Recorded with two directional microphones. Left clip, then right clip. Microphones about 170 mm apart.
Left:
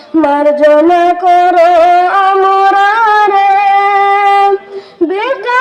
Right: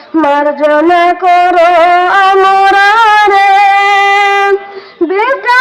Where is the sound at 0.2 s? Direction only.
50° left (ahead or behind).